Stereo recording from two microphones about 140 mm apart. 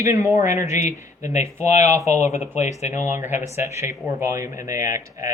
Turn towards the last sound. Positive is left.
turn(degrees=-20)  # may be behind; listen again after turning